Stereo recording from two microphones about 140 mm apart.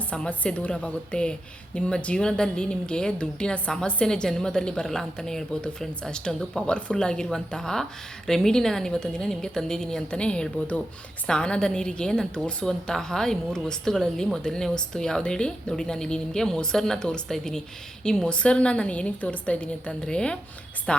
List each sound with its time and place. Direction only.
0.1 s a woman's voice: 10° left (ahead or behind)